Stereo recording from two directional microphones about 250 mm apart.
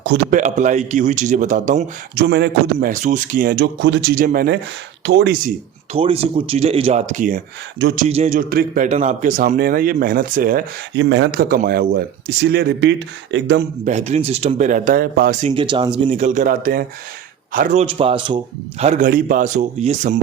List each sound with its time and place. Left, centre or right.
0.0 s speech: right
0.3 s speech: right
2.2 s speech: right
5.9 s speech: right
8.0 s speech: right
13.8 s speech: right